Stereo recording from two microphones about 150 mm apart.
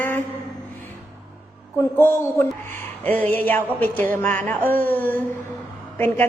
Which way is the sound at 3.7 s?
10° left (ahead or behind).